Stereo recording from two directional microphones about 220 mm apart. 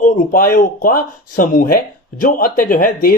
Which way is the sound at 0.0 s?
40° left (ahead or behind).